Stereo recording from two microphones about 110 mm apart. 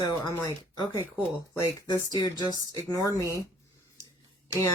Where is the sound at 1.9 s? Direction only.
35° left (ahead or behind).